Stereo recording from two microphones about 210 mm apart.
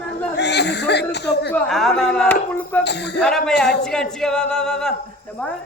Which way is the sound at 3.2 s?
5° left (ahead or behind).